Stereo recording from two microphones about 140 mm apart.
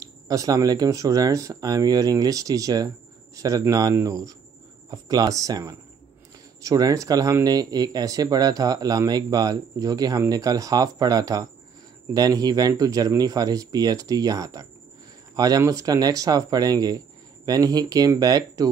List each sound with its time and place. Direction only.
0.0 s speech: 25° right (ahead or behind)